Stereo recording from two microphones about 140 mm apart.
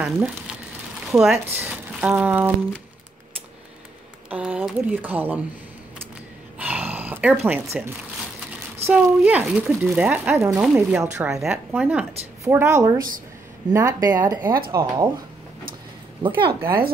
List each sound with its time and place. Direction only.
0.0 s speech: 10° right (ahead or behind)
4.3 s speech: 10° right (ahead or behind)
6.6 s speech: 10° right (ahead or behind)
11.4 s speech: 5° right (ahead or behind)
12.4 s speech: 20° right (ahead or behind)
16.2 s speech: 35° right (ahead or behind)
16.6 s speech: 90° right